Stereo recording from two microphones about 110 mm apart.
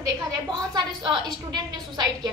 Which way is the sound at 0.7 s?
45° right (ahead or behind).